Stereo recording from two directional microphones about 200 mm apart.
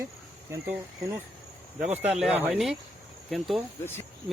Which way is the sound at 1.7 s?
5° right (ahead or behind).